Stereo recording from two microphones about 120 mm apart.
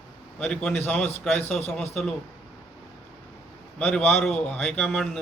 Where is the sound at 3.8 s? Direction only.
15° left (ahead or behind).